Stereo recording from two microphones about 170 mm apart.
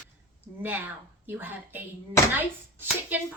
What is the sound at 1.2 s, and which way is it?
Speech, 10° right (ahead or behind).